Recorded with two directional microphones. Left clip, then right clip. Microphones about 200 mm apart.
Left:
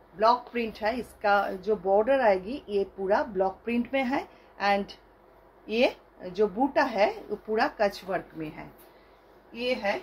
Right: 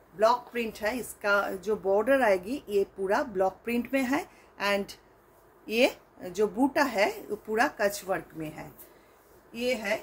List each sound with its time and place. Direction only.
0.2 s speech: 15° right (ahead or behind)